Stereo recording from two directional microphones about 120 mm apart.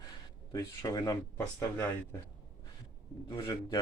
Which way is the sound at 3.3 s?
35° left (ahead or behind).